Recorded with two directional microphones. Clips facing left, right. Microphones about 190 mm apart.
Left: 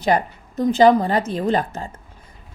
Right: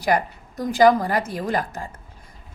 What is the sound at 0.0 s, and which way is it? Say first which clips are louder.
A woman's voice: left 2 dB; 25° left (ahead or behind).